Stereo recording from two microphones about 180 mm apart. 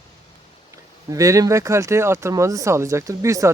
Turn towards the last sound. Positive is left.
turn(degrees=-15)  # may be behind; listen again after turning